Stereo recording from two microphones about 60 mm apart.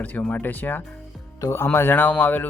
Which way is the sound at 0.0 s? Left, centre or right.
Left.